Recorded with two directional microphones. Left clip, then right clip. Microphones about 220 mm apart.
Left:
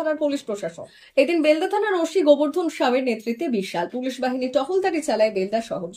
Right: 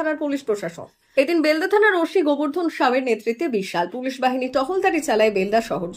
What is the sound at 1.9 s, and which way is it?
Speech, 40° right (ahead or behind).